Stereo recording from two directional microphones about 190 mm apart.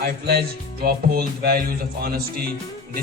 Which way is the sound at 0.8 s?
55° right (ahead or behind).